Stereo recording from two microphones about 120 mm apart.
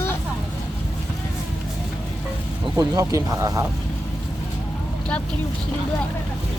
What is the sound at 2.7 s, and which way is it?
Speech, 30° right (ahead or behind).